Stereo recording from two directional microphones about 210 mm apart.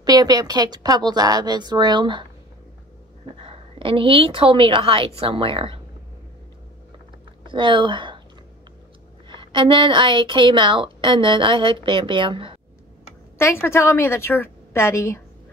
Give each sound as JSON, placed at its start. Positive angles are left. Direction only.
{"t": 0.0, "sound": "a woman's voice", "side_deg": -20}
{"t": 3.3, "sound": "a woman's voice", "side_deg": -25}
{"t": 7.4, "sound": "speech", "side_deg": -25}
{"t": 9.3, "sound": "a woman's voice", "side_deg": -25}
{"t": 13.4, "sound": "a woman's voice", "side_deg": 10}